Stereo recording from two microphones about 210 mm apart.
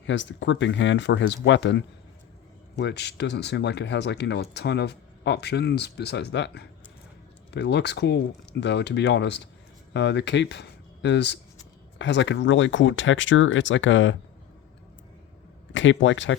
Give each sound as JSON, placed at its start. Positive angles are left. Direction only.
{"t": 0.0, "sound": "speech", "side_deg": 60}
{"t": 15.7, "sound": "speech", "side_deg": 65}